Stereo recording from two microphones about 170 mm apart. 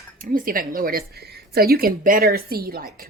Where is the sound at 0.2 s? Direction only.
55° right (ahead or behind).